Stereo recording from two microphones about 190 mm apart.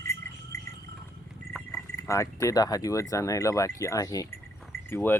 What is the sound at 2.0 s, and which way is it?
Speech, 15° left (ahead or behind).